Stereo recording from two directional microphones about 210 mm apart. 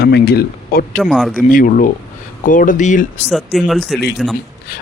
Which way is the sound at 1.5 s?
40° left (ahead or behind).